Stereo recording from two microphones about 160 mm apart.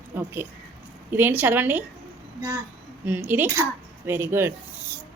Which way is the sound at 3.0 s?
10° right (ahead or behind).